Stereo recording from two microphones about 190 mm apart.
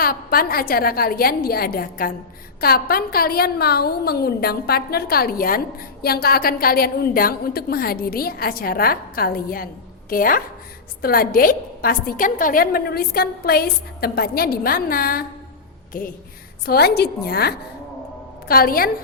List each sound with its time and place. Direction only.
0.0 s a woman's voice: 50° left (ahead or behind)
16.6 s a woman's voice: 55° left (ahead or behind)